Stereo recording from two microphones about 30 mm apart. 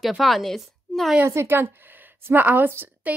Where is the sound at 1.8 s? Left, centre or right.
Right.